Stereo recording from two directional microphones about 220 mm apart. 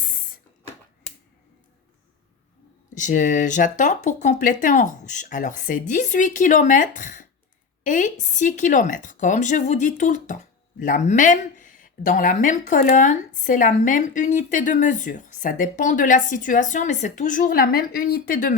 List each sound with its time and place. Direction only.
2.9 s speech: 35° left (ahead or behind)